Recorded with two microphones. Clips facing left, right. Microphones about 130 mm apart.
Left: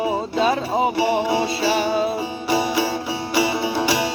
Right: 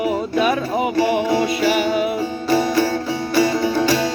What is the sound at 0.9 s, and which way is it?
Music, 15° left (ahead or behind).